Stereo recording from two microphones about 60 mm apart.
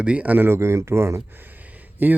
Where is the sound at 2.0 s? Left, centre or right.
Right.